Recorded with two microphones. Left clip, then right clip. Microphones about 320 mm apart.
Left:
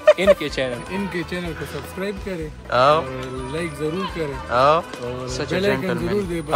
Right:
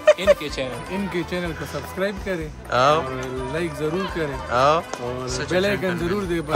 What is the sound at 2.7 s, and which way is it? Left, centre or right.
Speech, centre.